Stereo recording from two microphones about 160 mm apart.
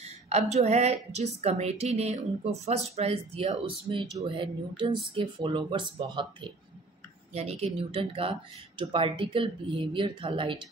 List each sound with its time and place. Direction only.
0.0 s a woman's voice: 45° right (ahead or behind)